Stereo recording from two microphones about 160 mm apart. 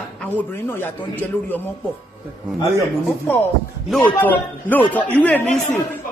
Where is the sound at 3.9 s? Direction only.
10° left (ahead or behind).